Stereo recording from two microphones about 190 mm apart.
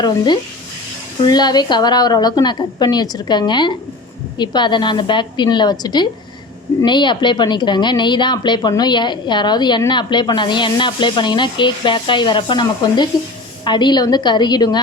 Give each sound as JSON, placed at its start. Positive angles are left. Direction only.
{"t": 1.2, "sound": "a woman's voice", "side_deg": 20}